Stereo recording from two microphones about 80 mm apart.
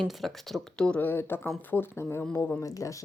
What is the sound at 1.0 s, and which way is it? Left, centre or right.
Speech, left.